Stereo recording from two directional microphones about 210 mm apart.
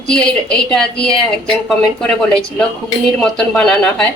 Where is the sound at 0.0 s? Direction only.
5° left (ahead or behind).